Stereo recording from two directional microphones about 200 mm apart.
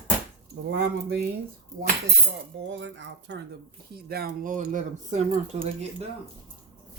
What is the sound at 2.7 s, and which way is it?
Speech, 65° right (ahead or behind).